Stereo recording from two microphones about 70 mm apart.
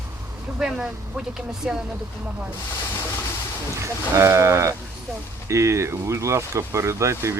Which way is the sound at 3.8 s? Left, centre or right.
Right.